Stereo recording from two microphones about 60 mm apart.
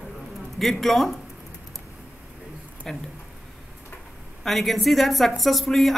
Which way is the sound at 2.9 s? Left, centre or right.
Centre.